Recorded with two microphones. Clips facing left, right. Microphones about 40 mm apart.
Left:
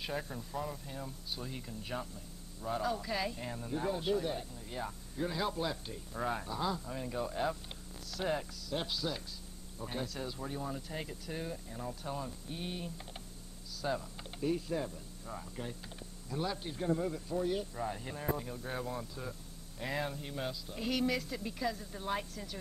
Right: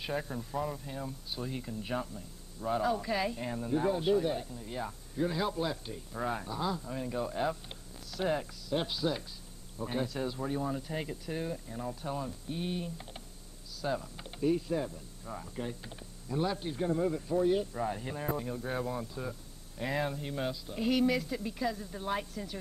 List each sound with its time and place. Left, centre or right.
0.0 s speech: centre